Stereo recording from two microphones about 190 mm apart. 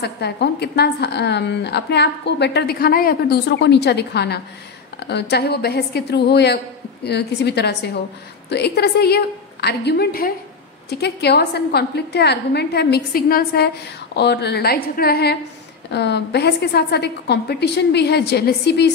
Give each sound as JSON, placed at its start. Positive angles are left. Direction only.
{"t": 0.0, "sound": "a woman's voice", "side_deg": 60}